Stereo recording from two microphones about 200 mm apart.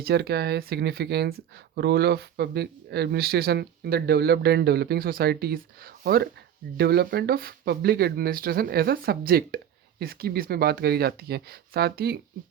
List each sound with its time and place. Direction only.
0.0 s speech: 55° right (ahead or behind)